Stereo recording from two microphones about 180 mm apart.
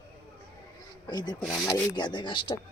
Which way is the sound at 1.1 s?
20° left (ahead or behind).